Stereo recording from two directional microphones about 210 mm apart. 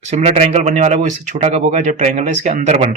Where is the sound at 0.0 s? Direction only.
30° right (ahead or behind).